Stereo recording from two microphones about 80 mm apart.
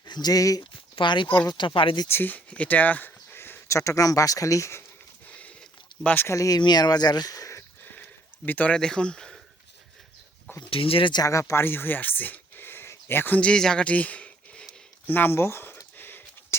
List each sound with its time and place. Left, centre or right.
0.0 s speech: left
0.6 s speech: left
2.0 s a sound: left
3.8 s speech: left
5.3 s a sound: centre
6.3 s speech: left
6.6 s speech: left
8.4 s speech: centre
10.6 s speech: left
11.3 s speech: left
11.6 s speech: left
16.0 s a sound: left